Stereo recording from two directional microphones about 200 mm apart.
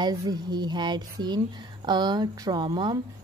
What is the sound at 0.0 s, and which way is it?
Speech, 20° right (ahead or behind).